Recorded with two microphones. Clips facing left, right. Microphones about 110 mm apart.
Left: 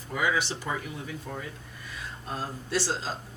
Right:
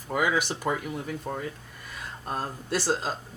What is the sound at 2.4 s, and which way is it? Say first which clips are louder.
Speech: even; 50° right (ahead or behind).